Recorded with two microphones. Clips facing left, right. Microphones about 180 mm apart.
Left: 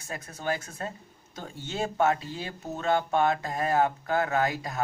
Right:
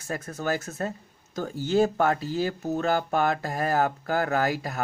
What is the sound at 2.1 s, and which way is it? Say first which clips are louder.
Speech: right 5 dB; 40° right (ahead or behind).